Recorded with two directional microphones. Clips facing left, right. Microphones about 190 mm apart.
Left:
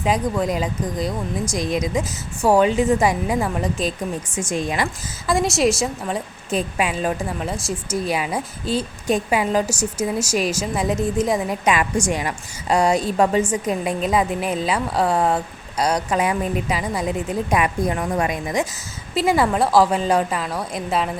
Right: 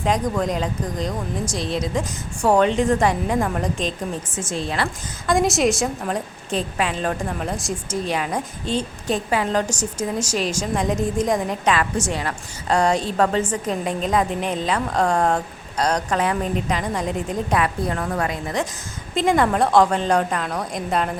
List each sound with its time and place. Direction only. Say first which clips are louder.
0.0 s a woman's voice: left 1 dB; 5° left (ahead or behind)
5.3 s a woman's voice: even; centre (ahead or behind)